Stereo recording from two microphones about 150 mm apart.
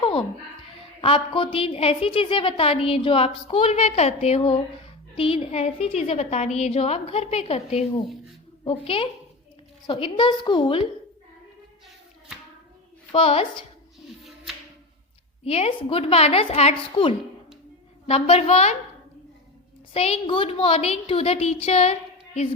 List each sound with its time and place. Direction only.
0.0 s a sound: 35° left (ahead or behind)
1.0 s a woman's voice: 35° left (ahead or behind)
13.1 s a woman's voice: 40° left (ahead or behind)
15.4 s a woman's voice: 40° left (ahead or behind)
19.9 s a woman's voice: 40° left (ahead or behind)